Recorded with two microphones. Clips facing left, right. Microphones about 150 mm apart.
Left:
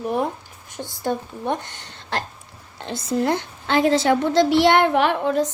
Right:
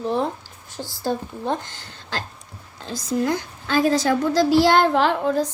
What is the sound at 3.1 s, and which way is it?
A child's voice, 30° left (ahead or behind).